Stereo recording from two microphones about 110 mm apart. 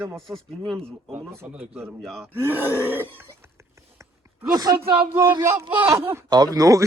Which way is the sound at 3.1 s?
25° right (ahead or behind).